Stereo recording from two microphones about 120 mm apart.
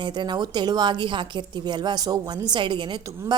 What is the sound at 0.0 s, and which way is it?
A woman's voice, 40° right (ahead or behind).